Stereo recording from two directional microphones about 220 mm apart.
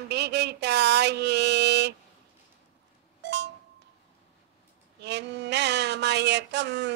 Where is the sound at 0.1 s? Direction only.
50° right (ahead or behind).